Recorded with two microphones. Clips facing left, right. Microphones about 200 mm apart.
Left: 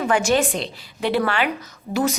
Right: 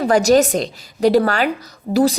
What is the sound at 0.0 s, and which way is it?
A woman's voice, 40° right (ahead or behind).